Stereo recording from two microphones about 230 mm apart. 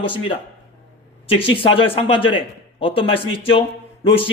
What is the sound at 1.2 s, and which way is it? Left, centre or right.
A man's voice, left.